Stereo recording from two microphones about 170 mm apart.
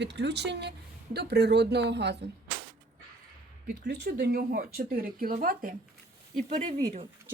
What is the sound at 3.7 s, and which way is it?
Speech, 75° right (ahead or behind).